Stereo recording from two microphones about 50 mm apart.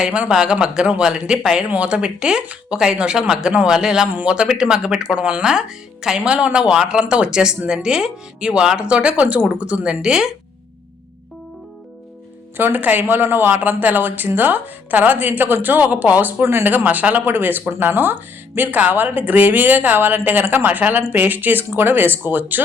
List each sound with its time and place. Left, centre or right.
0.3 s speech: centre
5.4 s speech: centre
12.5 s speech: right
16.4 s speech: right
16.6 s speech: right
20.7 s speech: right